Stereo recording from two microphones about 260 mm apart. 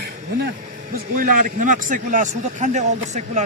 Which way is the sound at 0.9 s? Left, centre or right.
Right.